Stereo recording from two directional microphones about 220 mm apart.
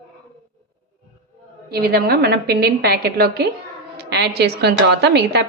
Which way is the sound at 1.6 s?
45° right (ahead or behind).